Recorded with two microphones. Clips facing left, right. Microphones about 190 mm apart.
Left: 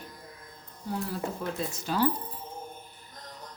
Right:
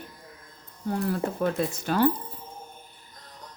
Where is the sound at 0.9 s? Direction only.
60° right (ahead or behind).